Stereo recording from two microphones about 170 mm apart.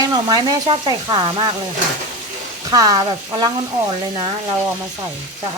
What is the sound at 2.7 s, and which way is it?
Speech, 20° right (ahead or behind).